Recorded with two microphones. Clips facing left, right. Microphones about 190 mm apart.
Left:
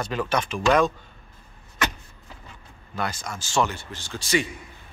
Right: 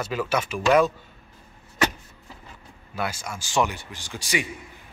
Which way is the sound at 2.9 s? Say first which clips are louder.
Even; 10° right (ahead or behind).